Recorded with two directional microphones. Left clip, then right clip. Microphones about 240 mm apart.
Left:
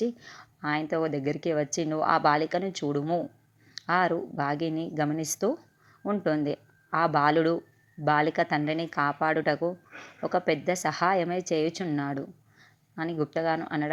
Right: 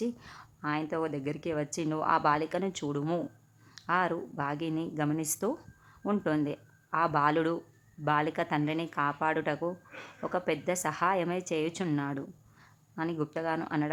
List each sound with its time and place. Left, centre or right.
0.0 s a woman's voice: centre
3.8 s a woman's voice: centre